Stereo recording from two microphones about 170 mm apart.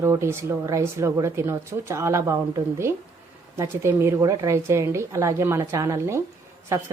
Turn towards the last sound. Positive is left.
turn(degrees=-15)  # may be behind; listen again after turning